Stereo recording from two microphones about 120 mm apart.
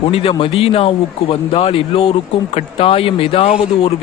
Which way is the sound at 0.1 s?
55° left (ahead or behind).